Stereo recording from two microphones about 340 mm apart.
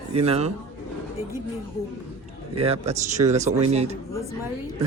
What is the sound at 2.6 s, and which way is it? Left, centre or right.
Speech, centre.